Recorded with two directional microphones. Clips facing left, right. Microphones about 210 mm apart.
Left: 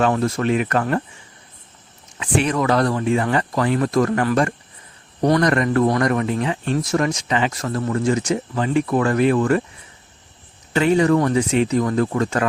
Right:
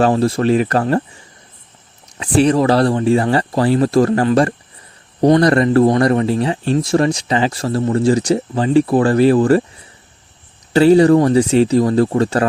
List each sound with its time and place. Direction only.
0.0 s speech: 35° right (ahead or behind)
2.1 s speech: 35° right (ahead or behind)
10.7 s speech: 35° right (ahead or behind)